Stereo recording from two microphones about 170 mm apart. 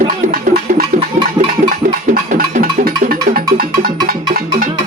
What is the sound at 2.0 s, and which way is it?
Music, 55° right (ahead or behind).